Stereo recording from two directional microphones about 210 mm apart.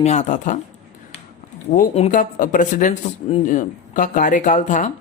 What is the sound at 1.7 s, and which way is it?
Speech, 30° left (ahead or behind).